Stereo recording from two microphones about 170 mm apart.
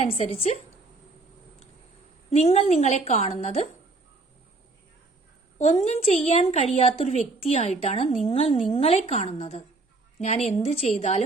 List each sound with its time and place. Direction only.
0.0 s a woman's voice: 35° left (ahead or behind)
2.3 s a woman's voice: 40° left (ahead or behind)
5.5 s a woman's voice: 40° left (ahead or behind)